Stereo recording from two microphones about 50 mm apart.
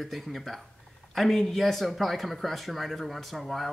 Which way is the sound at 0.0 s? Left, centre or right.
Centre.